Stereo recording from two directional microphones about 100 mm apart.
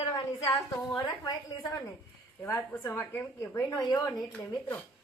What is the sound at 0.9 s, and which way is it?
Speech, 40° left (ahead or behind).